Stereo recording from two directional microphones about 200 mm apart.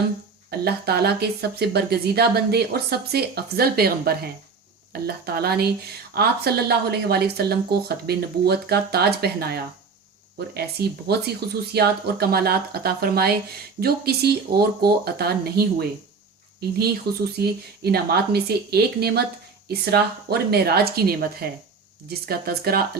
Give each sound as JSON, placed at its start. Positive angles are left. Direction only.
{"t": 0.6, "sound": "speech", "side_deg": -50}
{"t": 22.3, "sound": "speech", "side_deg": -50}